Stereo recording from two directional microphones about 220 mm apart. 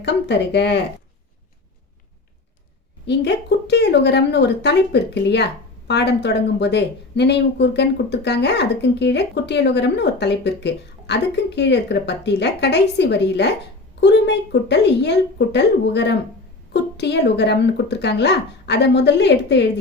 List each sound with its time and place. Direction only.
0.0 s speech: 50° left (ahead or behind)
3.1 s speech: 50° left (ahead or behind)